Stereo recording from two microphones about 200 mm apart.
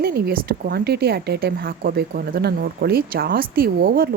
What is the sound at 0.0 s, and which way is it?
A woman's voice, 50° right (ahead or behind).